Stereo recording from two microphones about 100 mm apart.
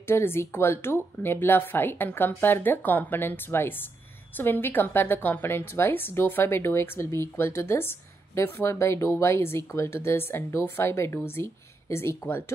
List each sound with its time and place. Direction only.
0.0 s speech: 25° left (ahead or behind)